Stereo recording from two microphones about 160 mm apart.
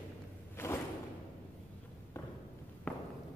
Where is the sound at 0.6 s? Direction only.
15° left (ahead or behind).